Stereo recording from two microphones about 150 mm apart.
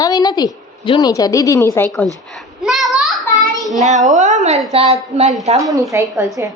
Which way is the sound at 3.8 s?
50° right (ahead or behind).